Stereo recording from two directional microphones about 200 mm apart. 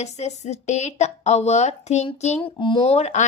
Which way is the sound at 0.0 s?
35° left (ahead or behind).